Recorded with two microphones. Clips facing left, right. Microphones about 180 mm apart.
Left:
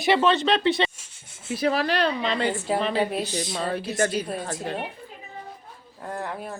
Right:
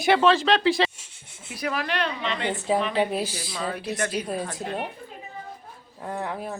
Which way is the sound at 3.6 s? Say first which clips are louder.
Left 2 dB; 30° left (ahead or behind).